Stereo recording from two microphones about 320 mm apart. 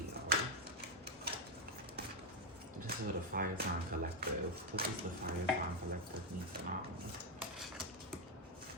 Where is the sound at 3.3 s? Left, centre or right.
Right.